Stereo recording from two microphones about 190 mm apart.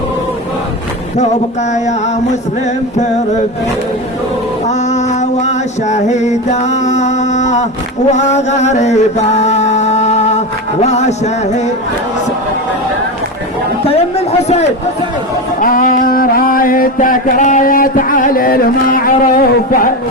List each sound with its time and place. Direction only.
4.6 s a sound: 35° left (ahead or behind)
8.1 s chant: 35° left (ahead or behind)
13.8 s a man's voice: 35° left (ahead or behind)
15.6 s mantra: 45° left (ahead or behind)